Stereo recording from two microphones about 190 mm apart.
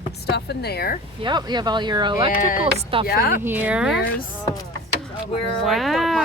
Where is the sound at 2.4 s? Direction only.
45° left (ahead or behind).